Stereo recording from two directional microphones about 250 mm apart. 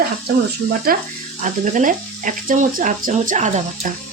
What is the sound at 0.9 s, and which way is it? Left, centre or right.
Speech, right.